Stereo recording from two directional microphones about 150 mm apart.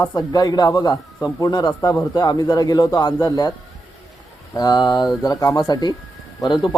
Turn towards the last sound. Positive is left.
turn(degrees=30)  # may be behind; listen again after turning